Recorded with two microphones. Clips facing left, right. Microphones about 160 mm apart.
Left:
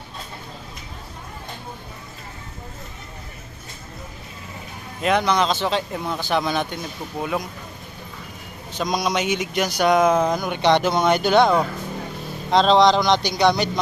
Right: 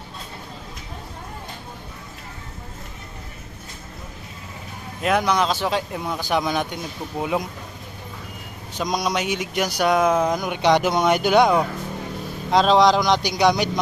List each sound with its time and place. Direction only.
5.0 s speech: 10° right (ahead or behind)
9.0 s speech: 5° right (ahead or behind)